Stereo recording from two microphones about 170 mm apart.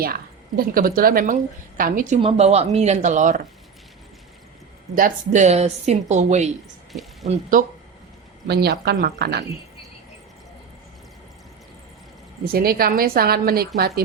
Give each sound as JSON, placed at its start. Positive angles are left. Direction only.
{"t": 0.0, "sound": "a woman's voice", "side_deg": -60}
{"t": 2.2, "sound": "speech", "side_deg": -35}
{"t": 4.9, "sound": "a woman's voice", "side_deg": -50}
{"t": 8.4, "sound": "speech", "side_deg": -70}
{"t": 12.5, "sound": "a woman's voice", "side_deg": -60}